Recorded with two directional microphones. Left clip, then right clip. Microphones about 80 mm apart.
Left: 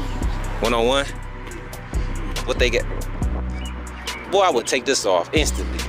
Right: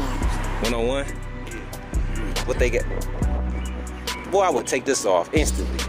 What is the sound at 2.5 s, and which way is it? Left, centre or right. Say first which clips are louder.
Music: left 3 dB; centre.